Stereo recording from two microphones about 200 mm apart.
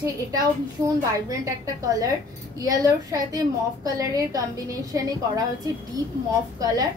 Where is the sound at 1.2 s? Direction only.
15° right (ahead or behind).